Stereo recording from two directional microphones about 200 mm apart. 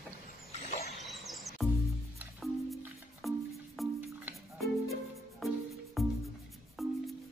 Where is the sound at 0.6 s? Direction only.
35° left (ahead or behind).